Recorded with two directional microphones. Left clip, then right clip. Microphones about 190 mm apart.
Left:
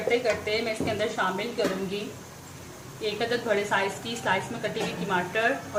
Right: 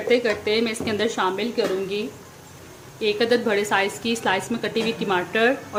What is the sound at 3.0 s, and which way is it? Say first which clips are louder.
A woman's voice: right 8 dB; 55° right (ahead or behind).